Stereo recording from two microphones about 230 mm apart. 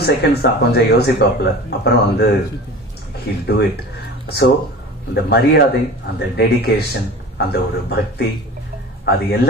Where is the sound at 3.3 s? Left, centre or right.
Left.